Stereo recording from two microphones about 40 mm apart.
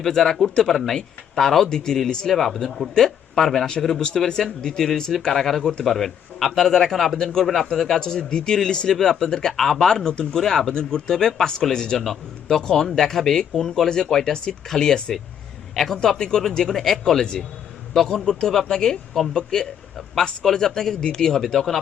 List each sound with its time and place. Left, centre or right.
0.0 s speech: centre
1.6 s a man's voice: centre
2.3 s a man's voice: centre
7.7 s speech: centre
9.9 s a man's voice: left
15.7 s a man's voice: centre
16.1 s a man's voice: centre